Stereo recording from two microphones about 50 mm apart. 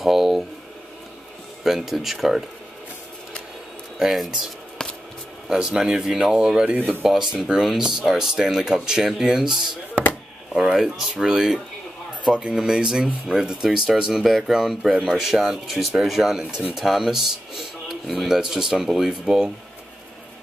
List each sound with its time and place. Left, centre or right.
0.0 s a sound: centre
1.6 s speech: centre
4.0 s speech: centre
4.8 s a sound: centre
5.5 s speech: centre
14.2 s speech: centre